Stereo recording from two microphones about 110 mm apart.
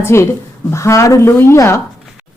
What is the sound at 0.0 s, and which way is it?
Speech, 25° left (ahead or behind).